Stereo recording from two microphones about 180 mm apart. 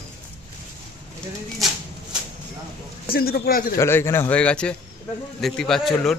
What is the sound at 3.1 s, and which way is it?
Speech, 55° left (ahead or behind).